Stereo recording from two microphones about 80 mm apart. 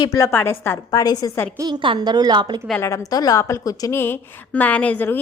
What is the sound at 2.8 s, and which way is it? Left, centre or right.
Speech, left.